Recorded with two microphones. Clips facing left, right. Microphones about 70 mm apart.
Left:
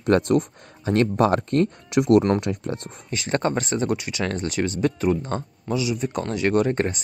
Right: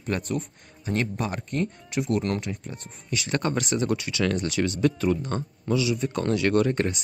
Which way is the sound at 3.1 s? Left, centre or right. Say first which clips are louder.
Left 3 dB; left.